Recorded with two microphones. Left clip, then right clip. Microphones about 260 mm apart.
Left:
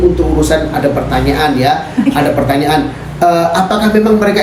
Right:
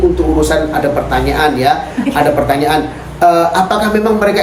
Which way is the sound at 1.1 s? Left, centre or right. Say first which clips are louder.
Even; centre.